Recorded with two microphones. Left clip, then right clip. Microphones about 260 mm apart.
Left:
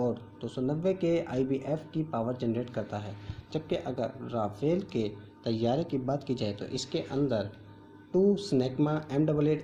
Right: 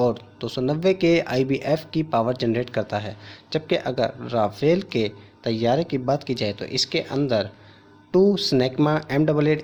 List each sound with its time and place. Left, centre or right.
0.0 s speech: right